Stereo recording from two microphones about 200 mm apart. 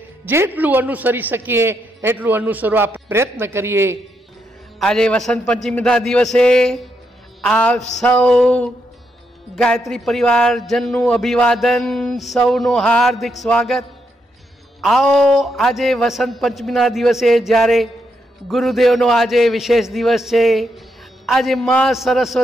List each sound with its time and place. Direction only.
0.2 s a man's voice: 10° right (ahead or behind)
4.7 s a man's voice: 5° left (ahead or behind)